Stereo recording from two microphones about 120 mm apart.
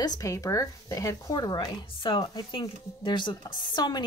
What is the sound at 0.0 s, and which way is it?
A woman's voice, 30° left (ahead or behind).